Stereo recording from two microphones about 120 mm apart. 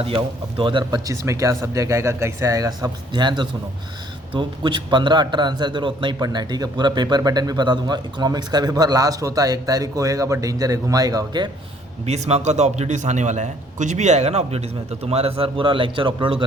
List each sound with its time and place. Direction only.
0.0 s speech: 50° right (ahead or behind); by 11.4 s 30° right (ahead or behind)
12.0 s a man's voice: 65° right (ahead or behind); by 16.4 s 45° right (ahead or behind)